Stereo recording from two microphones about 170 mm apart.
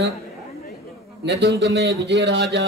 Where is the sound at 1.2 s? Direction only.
80° right.